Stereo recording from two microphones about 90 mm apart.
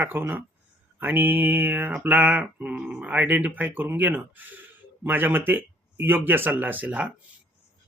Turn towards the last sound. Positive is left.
turn(degrees=-15)  # may be behind; listen again after turning